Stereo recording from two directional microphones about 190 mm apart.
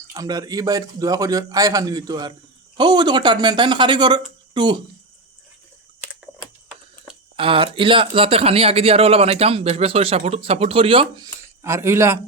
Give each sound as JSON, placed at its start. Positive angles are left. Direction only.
{"t": 0.1, "sound": "a man's voice", "side_deg": -20}
{"t": 6.0, "sound": "typing", "side_deg": 0}
{"t": 7.3, "sound": "speech", "side_deg": -30}
{"t": 11.6, "sound": "speech", "side_deg": -15}